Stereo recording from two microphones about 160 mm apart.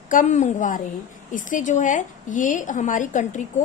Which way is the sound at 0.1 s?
50° left (ahead or behind).